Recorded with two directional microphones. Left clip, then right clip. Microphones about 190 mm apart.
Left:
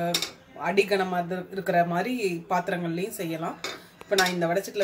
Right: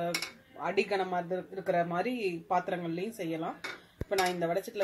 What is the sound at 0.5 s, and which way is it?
Speech, 35° right (ahead or behind).